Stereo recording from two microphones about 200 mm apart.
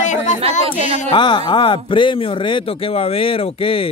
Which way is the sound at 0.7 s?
30° right (ahead or behind).